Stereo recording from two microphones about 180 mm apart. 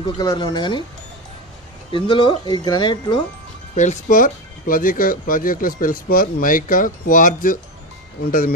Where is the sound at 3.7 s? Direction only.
45° left (ahead or behind).